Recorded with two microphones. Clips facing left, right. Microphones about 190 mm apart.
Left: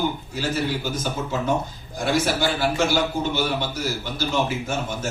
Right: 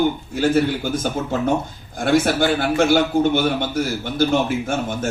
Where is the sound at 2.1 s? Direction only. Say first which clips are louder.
Right 5 dB; 55° right (ahead or behind).